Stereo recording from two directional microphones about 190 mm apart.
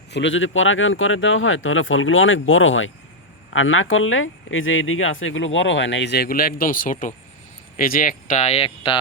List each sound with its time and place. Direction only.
0.1 s speech: 75° left (ahead or behind); by 9.0 s 30° left (ahead or behind)